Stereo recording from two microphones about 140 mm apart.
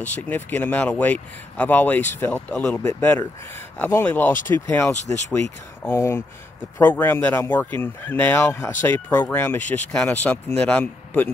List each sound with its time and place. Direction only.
0.3 s speech: 15° left (ahead or behind)